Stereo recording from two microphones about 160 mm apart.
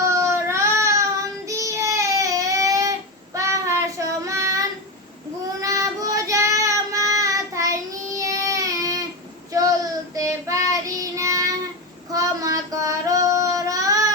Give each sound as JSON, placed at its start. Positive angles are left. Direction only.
{"t": 0.2, "sound": "child singing", "side_deg": -15}
{"t": 5.6, "sound": "child singing", "side_deg": -20}
{"t": 9.5, "sound": "a sound", "side_deg": -20}
{"t": 10.2, "sound": "child singing", "side_deg": -20}